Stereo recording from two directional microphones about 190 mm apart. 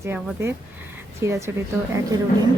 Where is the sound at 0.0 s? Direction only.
10° right (ahead or behind).